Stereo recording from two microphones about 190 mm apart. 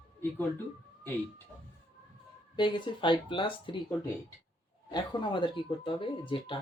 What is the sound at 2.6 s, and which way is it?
Speech, 25° left (ahead or behind).